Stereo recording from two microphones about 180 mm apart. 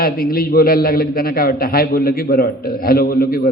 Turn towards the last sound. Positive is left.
turn(degrees=55)  # may be behind; listen again after turning